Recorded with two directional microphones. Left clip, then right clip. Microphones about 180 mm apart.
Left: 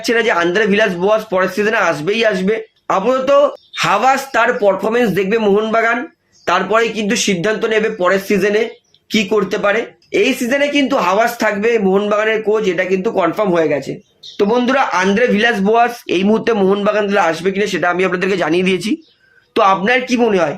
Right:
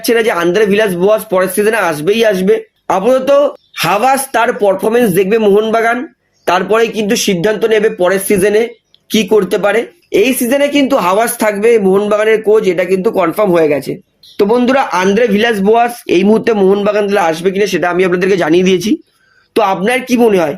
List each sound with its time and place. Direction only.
0.0 s speech: 45° right (ahead or behind)